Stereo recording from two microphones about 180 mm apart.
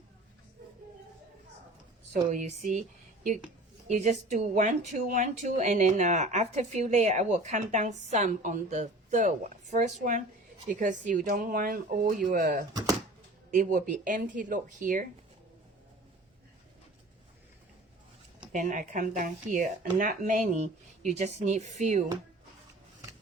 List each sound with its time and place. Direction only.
2.3 s speech: 45° right (ahead or behind)
3.8 s speech: 40° right (ahead or behind)
12.7 s a sound: 20° right (ahead or behind)
13.5 s speech: 45° right (ahead or behind)
18.5 s speech: 45° right (ahead or behind)